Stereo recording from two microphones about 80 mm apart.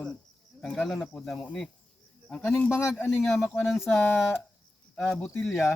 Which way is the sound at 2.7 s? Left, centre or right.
Left.